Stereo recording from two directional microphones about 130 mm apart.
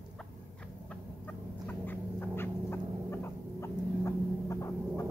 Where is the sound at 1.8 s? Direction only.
15° left (ahead or behind).